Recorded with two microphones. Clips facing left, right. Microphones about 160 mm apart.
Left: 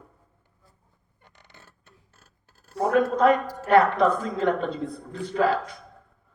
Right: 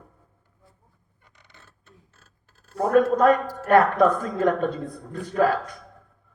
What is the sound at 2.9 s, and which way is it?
A man's voice, 50° right (ahead or behind).